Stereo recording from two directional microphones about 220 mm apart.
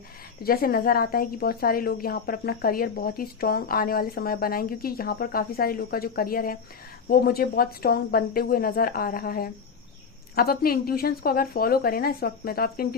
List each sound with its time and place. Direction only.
0.4 s a woman's voice: 40° left (ahead or behind)